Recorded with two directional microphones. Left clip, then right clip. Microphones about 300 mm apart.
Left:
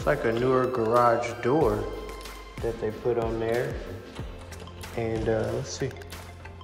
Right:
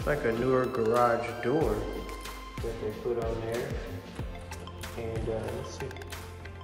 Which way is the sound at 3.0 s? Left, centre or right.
Centre.